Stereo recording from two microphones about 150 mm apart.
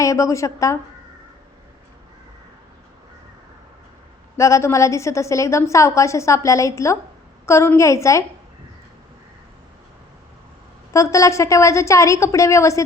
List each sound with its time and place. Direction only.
0.0 s a woman's voice: 20° left (ahead or behind)
4.4 s a woman's voice: 20° left (ahead or behind)
10.9 s a woman's voice: 20° left (ahead or behind)